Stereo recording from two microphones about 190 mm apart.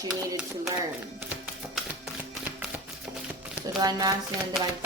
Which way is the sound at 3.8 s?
20° right (ahead or behind).